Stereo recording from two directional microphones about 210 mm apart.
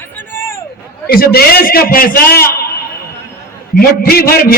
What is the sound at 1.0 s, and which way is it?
A man's voice, 45° left (ahead or behind).